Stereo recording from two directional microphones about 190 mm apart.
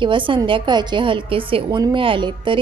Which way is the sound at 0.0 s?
25° right (ahead or behind).